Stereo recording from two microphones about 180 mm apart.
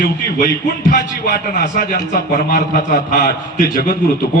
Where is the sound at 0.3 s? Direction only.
45° left (ahead or behind).